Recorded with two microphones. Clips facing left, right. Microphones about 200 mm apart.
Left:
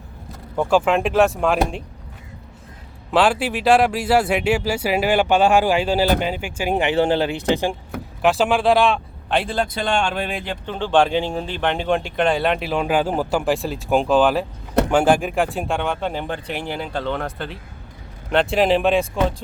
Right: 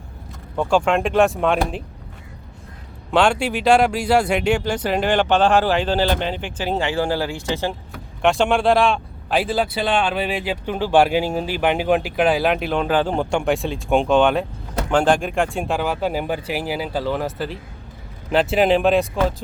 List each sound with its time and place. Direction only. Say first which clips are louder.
0.5 s a man's voice: left 1 dB; 5° left (ahead or behind)
3.1 s speech: even; 5° left (ahead or behind)
8.2 s a man's voice: even; 5° left (ahead or behind)